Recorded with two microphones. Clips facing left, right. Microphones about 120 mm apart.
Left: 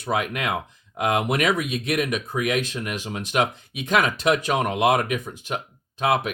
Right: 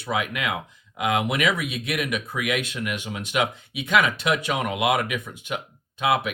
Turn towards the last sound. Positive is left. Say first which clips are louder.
# left 1 dB
turn(degrees=40)  # may be behind; listen again after turning